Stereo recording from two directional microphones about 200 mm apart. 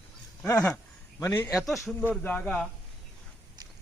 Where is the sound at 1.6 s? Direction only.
Centre (ahead or behind).